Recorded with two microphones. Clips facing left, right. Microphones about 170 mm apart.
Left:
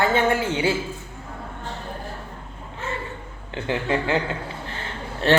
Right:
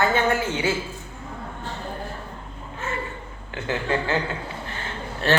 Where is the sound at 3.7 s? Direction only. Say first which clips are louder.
Left 1 dB; 15° left (ahead or behind).